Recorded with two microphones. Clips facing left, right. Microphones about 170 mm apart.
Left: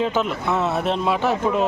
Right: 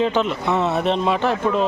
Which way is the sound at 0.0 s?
5° left (ahead or behind).